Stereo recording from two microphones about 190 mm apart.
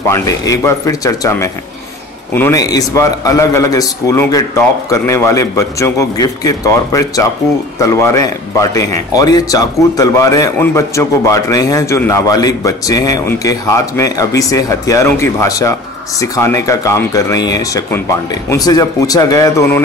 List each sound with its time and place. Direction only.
0.1 s speech: 15° left (ahead or behind)